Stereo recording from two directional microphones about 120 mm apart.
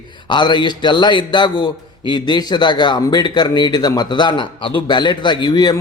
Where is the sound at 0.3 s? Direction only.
40° left (ahead or behind).